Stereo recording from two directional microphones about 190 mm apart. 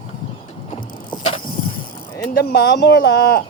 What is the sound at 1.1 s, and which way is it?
Vehicle, 30° left (ahead or behind).